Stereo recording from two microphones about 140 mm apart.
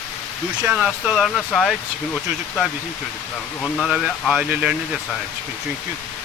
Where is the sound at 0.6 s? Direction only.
5° right (ahead or behind).